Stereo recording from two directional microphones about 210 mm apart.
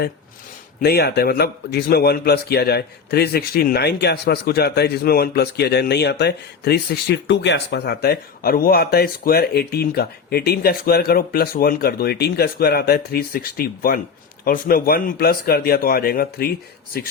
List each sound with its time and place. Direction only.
0.8 s a man's voice: 50° left (ahead or behind)